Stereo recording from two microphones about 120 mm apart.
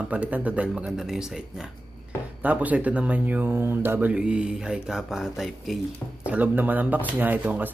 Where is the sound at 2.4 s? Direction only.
15° right (ahead or behind).